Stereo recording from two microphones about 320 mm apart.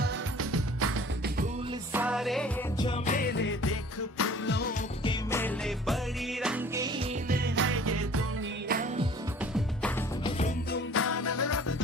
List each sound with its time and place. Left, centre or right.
0.0 s music: right
1.9 s music: centre
2.8 s music: left
5.0 s music: centre
7.3 s jingle bell: right
8.6 s music: right
10.2 s music: centre
10.9 s music: left